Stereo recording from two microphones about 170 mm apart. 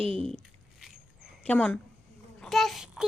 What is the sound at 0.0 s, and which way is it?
Speech, 35° right (ahead or behind).